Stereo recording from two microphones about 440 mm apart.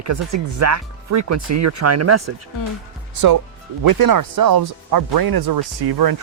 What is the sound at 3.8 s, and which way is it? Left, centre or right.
Speech, right.